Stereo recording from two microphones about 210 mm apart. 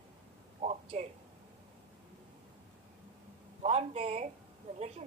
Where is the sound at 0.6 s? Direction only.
25° right (ahead or behind).